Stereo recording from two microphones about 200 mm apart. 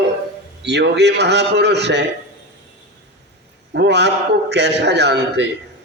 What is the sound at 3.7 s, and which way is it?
A man's voice, 60° right (ahead or behind).